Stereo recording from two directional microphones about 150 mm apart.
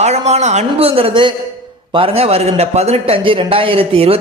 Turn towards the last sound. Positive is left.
turn(degrees=-40)  # may be behind; listen again after turning